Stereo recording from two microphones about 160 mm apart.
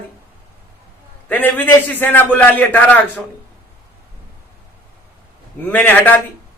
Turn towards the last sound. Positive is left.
turn(degrees=10)  # may be behind; listen again after turning